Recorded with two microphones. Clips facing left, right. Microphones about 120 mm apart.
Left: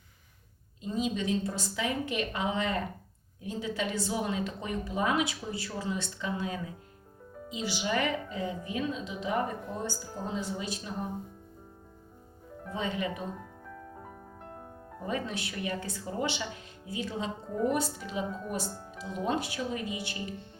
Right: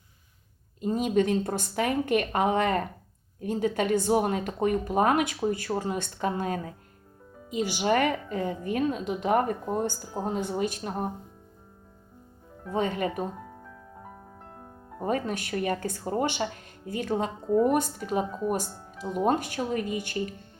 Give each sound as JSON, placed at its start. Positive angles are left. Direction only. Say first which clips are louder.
{"t": 0.8, "sound": "a woman's voice", "louder": "right 7 dB", "side_deg": -50}
{"t": 12.7, "sound": "a woman's voice", "louder": "right 6 dB", "side_deg": -50}
{"t": 15.0, "sound": "a woman's voice", "louder": "right 6 dB", "side_deg": -50}